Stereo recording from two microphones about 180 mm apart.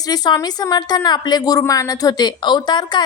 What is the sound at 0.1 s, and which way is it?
A woman's voice, 20° left (ahead or behind).